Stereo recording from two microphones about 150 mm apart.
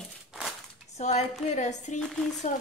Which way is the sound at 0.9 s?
50° left (ahead or behind).